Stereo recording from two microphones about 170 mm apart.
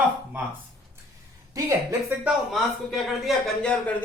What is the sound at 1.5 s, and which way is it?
Speech, 15° right (ahead or behind).